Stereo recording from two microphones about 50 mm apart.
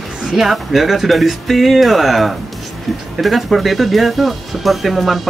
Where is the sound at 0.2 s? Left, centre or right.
Centre.